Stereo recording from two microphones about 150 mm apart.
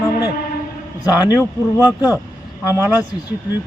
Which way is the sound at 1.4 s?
20° left (ahead or behind).